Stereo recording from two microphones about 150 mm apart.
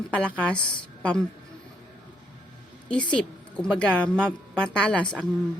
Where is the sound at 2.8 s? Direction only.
5° left (ahead or behind).